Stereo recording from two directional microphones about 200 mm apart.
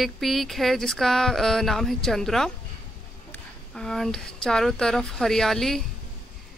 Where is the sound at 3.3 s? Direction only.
5° left (ahead or behind).